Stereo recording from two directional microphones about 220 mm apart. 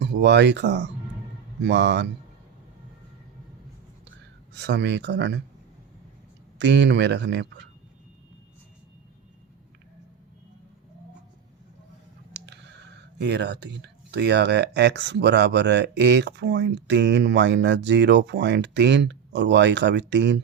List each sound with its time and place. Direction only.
0.0 s speech: 50° right (ahead or behind)
4.5 s speech: 50° right (ahead or behind)
6.6 s speech: 55° right (ahead or behind)
12.3 s speech: 50° right (ahead or behind)